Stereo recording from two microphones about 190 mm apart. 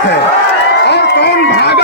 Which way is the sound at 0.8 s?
60° left (ahead or behind).